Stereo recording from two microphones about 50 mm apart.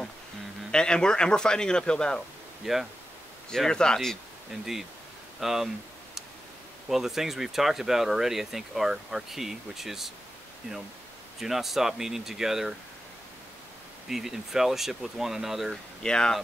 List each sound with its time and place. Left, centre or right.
0.7 s speech: centre
2.6 s speech: centre
3.4 s speech: centre
4.5 s speech: centre
6.9 s speech: centre
11.3 s speech: centre
14.0 s speech: centre
16.0 s speech: centre